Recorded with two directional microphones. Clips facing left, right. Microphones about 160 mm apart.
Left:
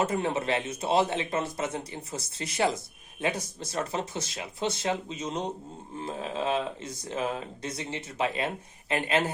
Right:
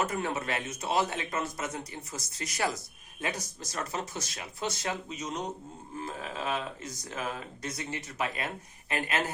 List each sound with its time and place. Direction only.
0.0 s a man's voice: 25° left (ahead or behind)